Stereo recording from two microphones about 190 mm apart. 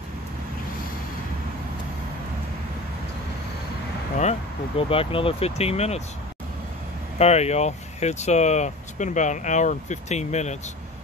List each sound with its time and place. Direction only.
4.2 s speech: 35° left (ahead or behind)
7.2 s speech: 35° left (ahead or behind)